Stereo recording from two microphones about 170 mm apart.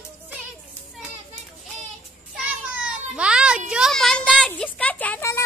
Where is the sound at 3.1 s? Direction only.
5° right (ahead or behind).